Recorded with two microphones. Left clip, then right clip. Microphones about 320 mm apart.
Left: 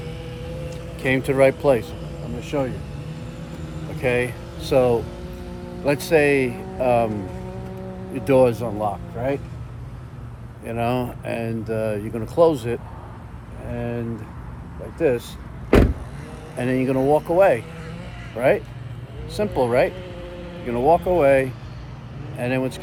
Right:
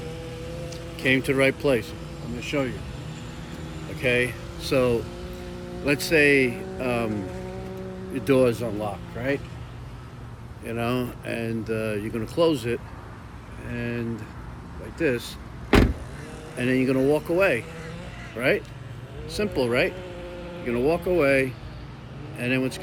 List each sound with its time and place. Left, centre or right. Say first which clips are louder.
0.7 s speech: even; centre
3.9 s speech: left 1 dB; centre
6.5 s a sound: left 5 dB; centre
6.8 s speech: left 8 dB; centre
8.1 s speech: left 4 dB; centre
10.7 s speech: left 4 dB; centre
13.7 s speech: left 3 dB; centre
16.6 s speech: left 2 dB; centre
19.6 s speech: left 6 dB; centre